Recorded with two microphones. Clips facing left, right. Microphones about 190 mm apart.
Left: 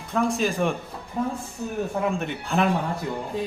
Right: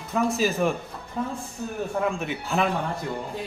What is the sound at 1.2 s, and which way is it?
Speech, 15° left (ahead or behind).